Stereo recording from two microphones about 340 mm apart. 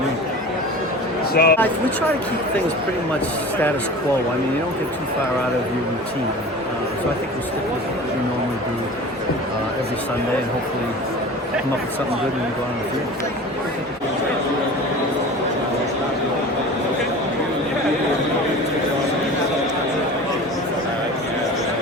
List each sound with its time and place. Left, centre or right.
1.3 s speech: left